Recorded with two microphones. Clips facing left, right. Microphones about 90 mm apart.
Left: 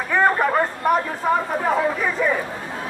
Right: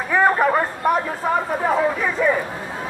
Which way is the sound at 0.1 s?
5° right (ahead or behind).